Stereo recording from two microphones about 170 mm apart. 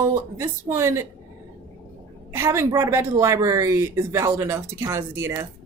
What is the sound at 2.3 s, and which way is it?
A woman's voice, 15° right (ahead or behind).